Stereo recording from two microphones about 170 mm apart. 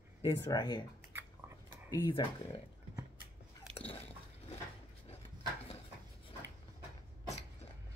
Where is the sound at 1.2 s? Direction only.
10° right (ahead or behind).